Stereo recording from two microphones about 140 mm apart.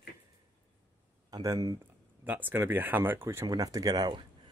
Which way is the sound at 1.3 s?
25° right (ahead or behind).